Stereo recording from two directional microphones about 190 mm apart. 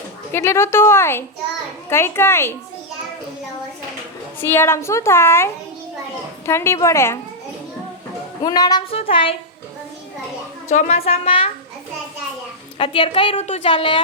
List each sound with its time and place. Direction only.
0.3 s a woman's voice: 15° left (ahead or behind)
4.4 s a woman's voice: 10° left (ahead or behind)
8.4 s a woman's voice: 20° left (ahead or behind)
10.7 s a woman's voice: 35° left (ahead or behind)
12.8 s a woman's voice: 30° left (ahead or behind)